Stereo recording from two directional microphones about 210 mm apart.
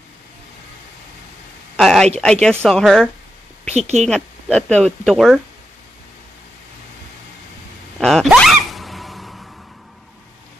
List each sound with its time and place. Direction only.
1.8 s a woman's voice: centre (ahead or behind)
3.6 s a woman's voice: 30° right (ahead or behind)
4.0 s a woman's voice: 5° left (ahead or behind)
8.0 s zipper: centre (ahead or behind)